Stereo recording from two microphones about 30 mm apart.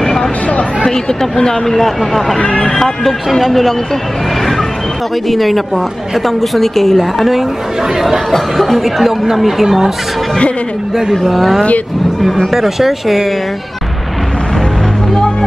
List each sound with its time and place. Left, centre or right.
0.0 s a sound: centre
1.3 s speech: left
1.8 s speech: centre
2.4 s speech: left
2.8 s speech: centre
5.3 s speech: centre
8.3 s speech: centre
11.0 s speech: centre